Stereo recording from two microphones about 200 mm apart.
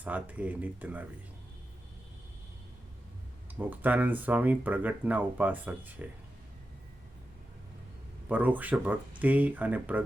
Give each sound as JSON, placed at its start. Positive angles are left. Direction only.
{"t": 0.0, "sound": "speech", "side_deg": -10}
{"t": 3.6, "sound": "speech", "side_deg": -10}
{"t": 8.3, "sound": "speech", "side_deg": -10}